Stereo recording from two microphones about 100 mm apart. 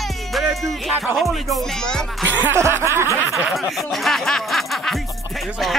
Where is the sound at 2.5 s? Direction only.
25° right (ahead or behind).